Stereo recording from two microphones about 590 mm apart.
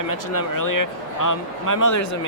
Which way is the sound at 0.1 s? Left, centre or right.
Left.